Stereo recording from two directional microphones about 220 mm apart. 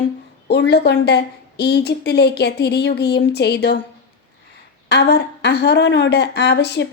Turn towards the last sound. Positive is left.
turn(degrees=50)  # may be behind; listen again after turning